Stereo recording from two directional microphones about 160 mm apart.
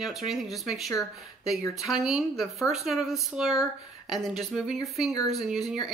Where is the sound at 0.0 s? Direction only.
Centre (ahead or behind).